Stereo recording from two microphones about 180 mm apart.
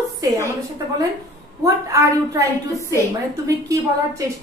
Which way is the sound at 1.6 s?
15° right (ahead or behind).